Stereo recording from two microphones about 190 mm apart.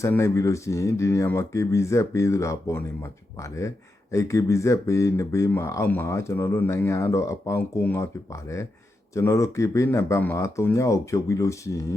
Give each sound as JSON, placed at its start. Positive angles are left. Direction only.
{"t": 0.0, "sound": "speech", "side_deg": 15}